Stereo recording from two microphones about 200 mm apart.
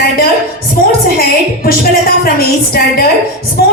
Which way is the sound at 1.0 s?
45° left (ahead or behind).